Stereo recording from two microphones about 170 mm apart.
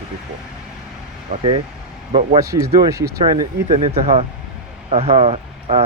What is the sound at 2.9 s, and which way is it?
Speech, 20° right (ahead or behind).